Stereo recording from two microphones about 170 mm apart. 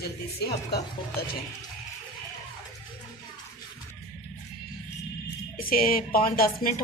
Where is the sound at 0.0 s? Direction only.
70° left (ahead or behind).